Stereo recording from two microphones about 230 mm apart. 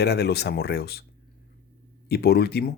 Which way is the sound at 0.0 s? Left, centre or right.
Left.